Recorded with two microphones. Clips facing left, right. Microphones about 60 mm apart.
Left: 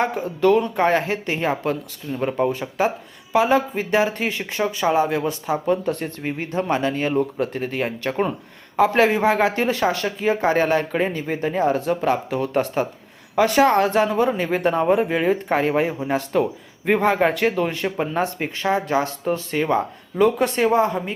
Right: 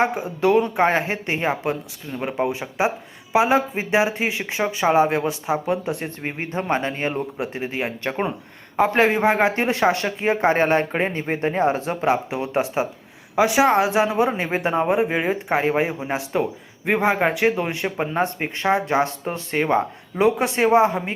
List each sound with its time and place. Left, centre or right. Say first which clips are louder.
0.0 s speech: left 1 dB; centre; by 5.3 s right
5.5 s speech: left 4 dB; centre
6.2 s speech: left 2 dB; right
7.2 s speech: left 4 dB; centre; by 12.0 s right
12.0 s speech: even; centre
18.6 s speech: right 1 dB; right
20.1 s speech: left 1 dB; centre